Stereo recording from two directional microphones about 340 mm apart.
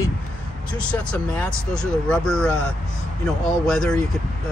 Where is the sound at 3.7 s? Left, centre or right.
Centre.